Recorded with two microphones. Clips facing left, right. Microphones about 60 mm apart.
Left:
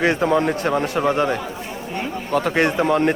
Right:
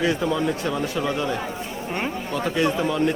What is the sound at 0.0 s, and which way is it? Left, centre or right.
A man's voice, left.